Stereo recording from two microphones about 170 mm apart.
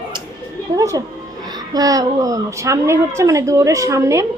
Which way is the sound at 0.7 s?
20° right (ahead or behind).